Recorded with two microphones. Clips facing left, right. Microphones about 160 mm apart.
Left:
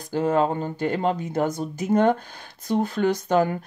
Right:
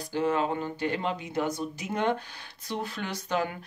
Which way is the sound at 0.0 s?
45° left (ahead or behind).